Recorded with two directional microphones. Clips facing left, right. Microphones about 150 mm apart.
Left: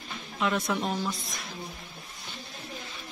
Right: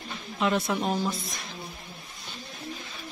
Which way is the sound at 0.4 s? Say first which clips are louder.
Right 2 dB; 5° right (ahead or behind).